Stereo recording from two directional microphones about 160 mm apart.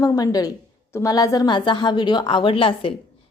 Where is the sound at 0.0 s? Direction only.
25° left (ahead or behind).